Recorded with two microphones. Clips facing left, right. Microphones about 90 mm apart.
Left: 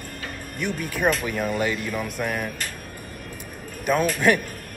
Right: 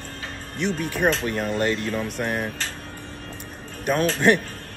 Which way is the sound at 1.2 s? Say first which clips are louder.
Right 1 dB; 5° left (ahead or behind).